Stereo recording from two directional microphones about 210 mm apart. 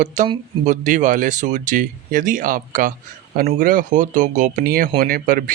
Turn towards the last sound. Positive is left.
turn(degrees=-40)  # may be behind; listen again after turning